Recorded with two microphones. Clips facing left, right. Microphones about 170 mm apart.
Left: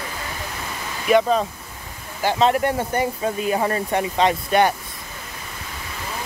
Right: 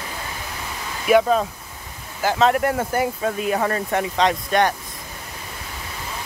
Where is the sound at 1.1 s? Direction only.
5° right (ahead or behind).